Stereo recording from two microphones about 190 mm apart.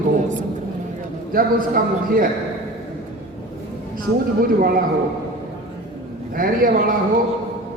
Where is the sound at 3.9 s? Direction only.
50° right (ahead or behind).